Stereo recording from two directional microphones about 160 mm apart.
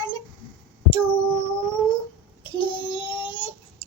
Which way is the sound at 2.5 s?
30° left (ahead or behind).